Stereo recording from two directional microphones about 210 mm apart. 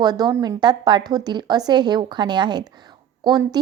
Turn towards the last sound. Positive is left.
turn(degrees=-20)  # may be behind; listen again after turning